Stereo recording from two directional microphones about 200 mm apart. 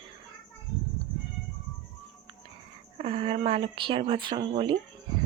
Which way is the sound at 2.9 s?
30° right (ahead or behind).